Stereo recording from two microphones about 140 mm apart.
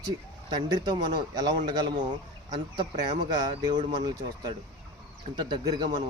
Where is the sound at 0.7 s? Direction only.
30° right (ahead or behind).